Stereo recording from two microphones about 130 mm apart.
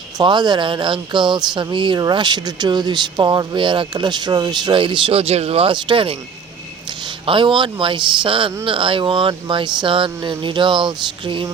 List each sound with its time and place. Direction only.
0.2 s speech: 35° right (ahead or behind)
7.3 s speech: 40° right (ahead or behind)